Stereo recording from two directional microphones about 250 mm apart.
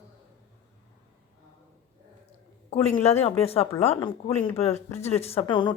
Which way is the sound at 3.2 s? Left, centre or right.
Left.